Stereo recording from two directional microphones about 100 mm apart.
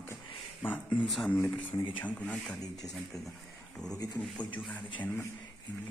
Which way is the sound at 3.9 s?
40° left (ahead or behind).